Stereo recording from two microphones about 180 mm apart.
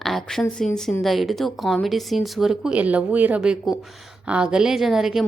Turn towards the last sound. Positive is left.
turn(degrees=0)  # may be behind; listen again after turning